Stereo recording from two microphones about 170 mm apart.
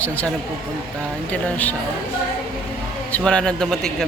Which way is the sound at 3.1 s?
5° left (ahead or behind).